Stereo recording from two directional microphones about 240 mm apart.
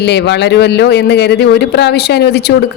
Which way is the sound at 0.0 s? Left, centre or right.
Left.